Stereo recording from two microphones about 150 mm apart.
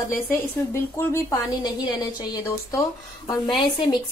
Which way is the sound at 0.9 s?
20° left (ahead or behind).